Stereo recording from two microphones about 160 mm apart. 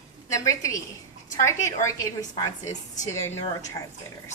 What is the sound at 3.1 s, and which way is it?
Speech, 15° left (ahead or behind).